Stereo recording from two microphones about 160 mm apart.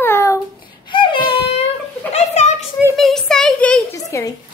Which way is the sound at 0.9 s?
30° left (ahead or behind).